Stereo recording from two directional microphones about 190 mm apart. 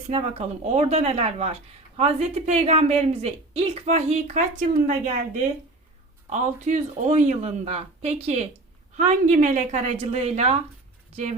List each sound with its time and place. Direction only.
0.1 s a woman's voice: 35° right (ahead or behind)
6.3 s a woman's voice: 40° right (ahead or behind)